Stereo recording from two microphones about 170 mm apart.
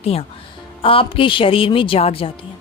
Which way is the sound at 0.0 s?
35° left (ahead or behind).